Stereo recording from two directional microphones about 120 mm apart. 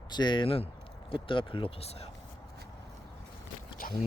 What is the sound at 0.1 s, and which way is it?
Speech, 40° left (ahead or behind).